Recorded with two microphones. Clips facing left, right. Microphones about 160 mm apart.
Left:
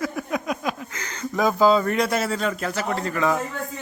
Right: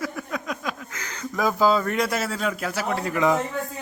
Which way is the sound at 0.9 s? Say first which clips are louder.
Left 3 dB; 5° right (ahead or behind).